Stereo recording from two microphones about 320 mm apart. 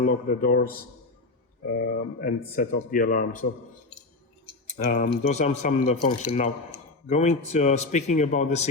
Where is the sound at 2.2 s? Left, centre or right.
Left.